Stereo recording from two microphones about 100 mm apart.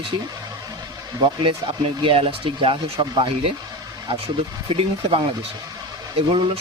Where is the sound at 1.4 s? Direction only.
60° right (ahead or behind).